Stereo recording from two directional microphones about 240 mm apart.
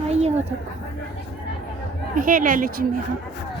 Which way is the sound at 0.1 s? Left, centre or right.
Right.